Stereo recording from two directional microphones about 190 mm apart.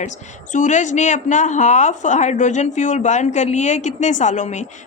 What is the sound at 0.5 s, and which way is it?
A woman's voice, 40° left (ahead or behind).